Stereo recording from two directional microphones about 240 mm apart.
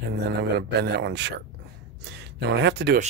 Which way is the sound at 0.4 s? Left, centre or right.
Right.